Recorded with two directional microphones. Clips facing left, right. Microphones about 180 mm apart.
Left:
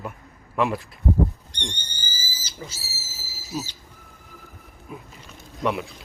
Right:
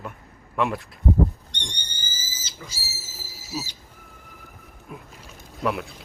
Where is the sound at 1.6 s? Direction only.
15° right (ahead or behind).